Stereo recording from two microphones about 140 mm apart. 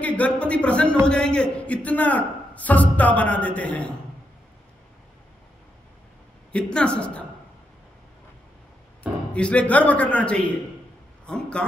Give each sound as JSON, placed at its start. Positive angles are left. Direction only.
{"t": 0.0, "sound": "a man's voice", "side_deg": 10}
{"t": 6.5, "sound": "a man's voice", "side_deg": 5}
{"t": 9.3, "sound": "a man's voice", "side_deg": 10}